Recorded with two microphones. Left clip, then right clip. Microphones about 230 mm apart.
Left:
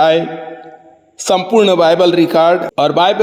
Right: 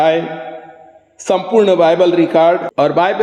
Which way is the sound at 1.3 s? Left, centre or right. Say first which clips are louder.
Left 1 dB; left.